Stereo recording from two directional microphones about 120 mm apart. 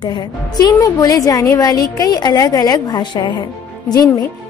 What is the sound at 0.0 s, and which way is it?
A woman's voice, 40° left (ahead or behind).